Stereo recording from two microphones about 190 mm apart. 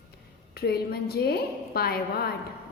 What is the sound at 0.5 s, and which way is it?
A woman's voice, 55° left (ahead or behind).